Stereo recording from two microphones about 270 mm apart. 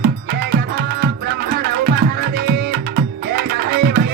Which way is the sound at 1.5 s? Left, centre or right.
Right.